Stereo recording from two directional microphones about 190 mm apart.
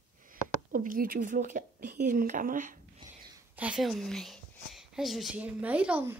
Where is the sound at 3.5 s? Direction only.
5° right (ahead or behind).